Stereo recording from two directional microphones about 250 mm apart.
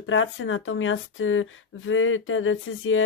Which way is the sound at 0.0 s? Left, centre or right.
Left.